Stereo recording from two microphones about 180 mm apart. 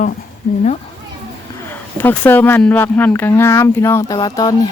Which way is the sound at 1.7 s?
10° left (ahead or behind).